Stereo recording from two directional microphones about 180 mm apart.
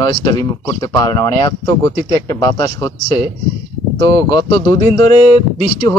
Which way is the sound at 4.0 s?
25° left (ahead or behind).